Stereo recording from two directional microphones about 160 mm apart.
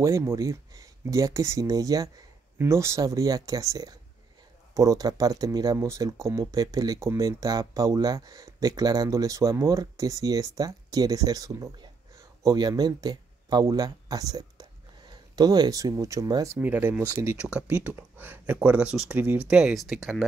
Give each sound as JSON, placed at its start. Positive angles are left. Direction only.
{"t": 0.0, "sound": "speech", "side_deg": -15}
{"t": 16.5, "sound": "speech", "side_deg": -10}